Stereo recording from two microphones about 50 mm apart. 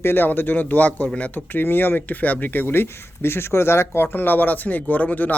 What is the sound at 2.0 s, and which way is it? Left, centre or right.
Speech, left.